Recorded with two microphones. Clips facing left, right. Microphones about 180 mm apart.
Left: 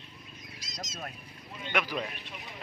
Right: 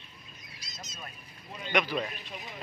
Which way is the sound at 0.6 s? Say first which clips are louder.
Left 5 dB; 90° left.